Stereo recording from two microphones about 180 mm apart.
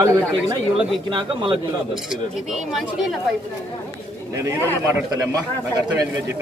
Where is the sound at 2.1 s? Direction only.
Centre (ahead or behind).